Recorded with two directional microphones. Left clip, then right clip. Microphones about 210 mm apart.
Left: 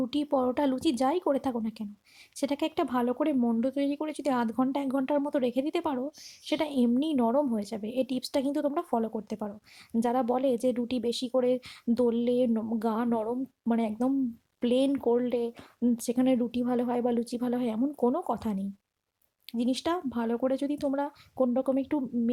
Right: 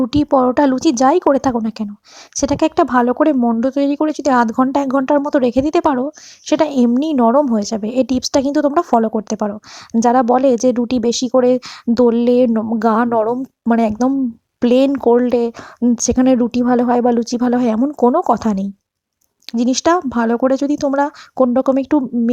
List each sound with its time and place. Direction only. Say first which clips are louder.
0.0 s a woman's voice: right 14 dB; 30° right (ahead or behind)